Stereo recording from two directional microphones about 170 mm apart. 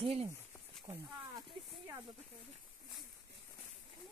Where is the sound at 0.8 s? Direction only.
20° right (ahead or behind).